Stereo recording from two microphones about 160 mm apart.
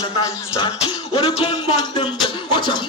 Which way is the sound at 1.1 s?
35° left (ahead or behind).